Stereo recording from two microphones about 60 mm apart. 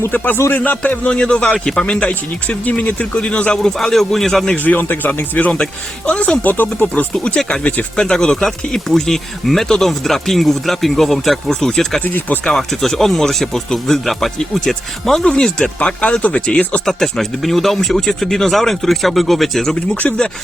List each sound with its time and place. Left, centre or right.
0.5 s speech: left; by 4.5 s centre
4.5 s speech: left
7.1 s speech: centre
15.8 s speech: centre
16.8 s speech: centre
20.0 s speech: centre